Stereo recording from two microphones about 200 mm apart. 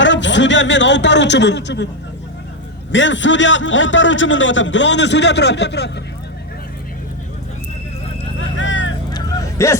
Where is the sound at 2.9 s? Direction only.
65° left (ahead or behind).